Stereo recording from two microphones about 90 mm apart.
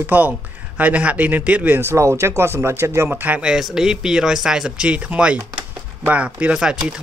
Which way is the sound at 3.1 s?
15° right (ahead or behind).